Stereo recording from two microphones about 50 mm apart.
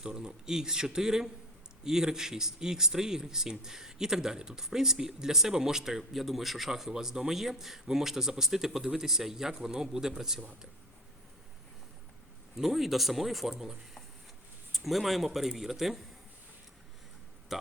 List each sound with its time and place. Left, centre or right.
0.0 s speech: centre
12.5 s speech: centre
17.5 s speech: centre